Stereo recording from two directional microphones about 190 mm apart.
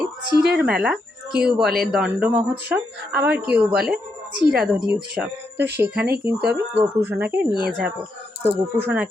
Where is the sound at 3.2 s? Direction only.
55° right (ahead or behind).